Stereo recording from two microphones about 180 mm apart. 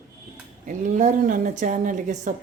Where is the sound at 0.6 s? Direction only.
45° right (ahead or behind).